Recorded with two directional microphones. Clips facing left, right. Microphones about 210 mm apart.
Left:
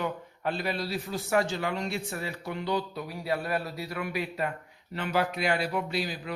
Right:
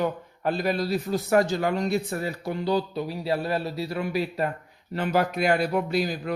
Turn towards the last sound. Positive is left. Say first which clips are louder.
# right 6 dB
turn(degrees=-45)  # may be behind; listen again after turning